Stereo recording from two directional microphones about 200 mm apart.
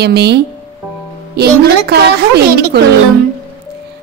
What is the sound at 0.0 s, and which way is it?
A woman's voice, 55° right (ahead or behind).